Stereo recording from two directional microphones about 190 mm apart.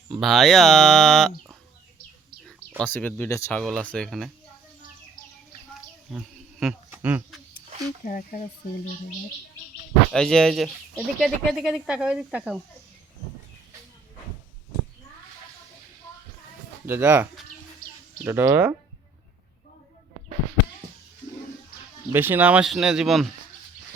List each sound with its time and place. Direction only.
0.2 s speech: centre (ahead or behind)
2.4 s speech: 5° left (ahead or behind)
3.6 s speech: 5° left (ahead or behind)
6.1 s a sound: 5° right (ahead or behind)
6.9 s speech: 10° right (ahead or behind)
8.0 s speech: 45° left (ahead or behind)
10.1 s speech: 5° left (ahead or behind)
16.8 s speech: 10° right (ahead or behind)
18.3 s speech: 15° right (ahead or behind)
22.1 s speech: 10° right (ahead or behind)